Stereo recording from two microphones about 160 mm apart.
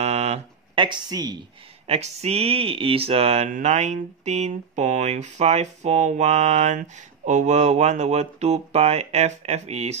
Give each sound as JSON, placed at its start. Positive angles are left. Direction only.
{"t": 0.0, "sound": "a sound", "side_deg": -40}
{"t": 0.8, "sound": "a woman's voice", "side_deg": -25}
{"t": 1.9, "sound": "speech", "side_deg": -40}